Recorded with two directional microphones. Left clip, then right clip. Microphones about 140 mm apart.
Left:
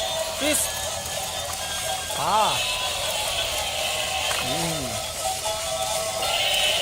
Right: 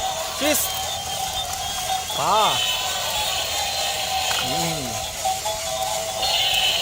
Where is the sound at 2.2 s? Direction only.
55° right (ahead or behind).